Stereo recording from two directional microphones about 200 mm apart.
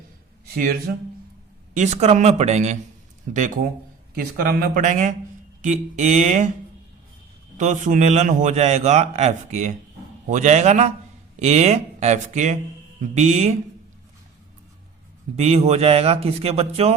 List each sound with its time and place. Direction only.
0.5 s speech: 45° right (ahead or behind)
1.7 s a man's voice: 35° right (ahead or behind)
7.6 s a man's voice: 35° right (ahead or behind)
15.4 s a man's voice: 30° right (ahead or behind)